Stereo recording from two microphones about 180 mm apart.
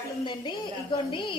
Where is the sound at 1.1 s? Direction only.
25° left (ahead or behind).